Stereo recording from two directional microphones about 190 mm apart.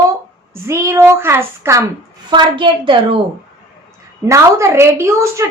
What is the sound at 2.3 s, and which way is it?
Speech, 25° right (ahead or behind).